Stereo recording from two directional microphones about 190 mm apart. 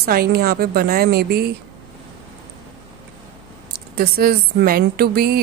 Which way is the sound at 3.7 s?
55° right (ahead or behind).